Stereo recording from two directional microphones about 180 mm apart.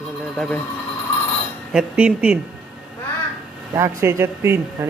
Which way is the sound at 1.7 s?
5° right (ahead or behind).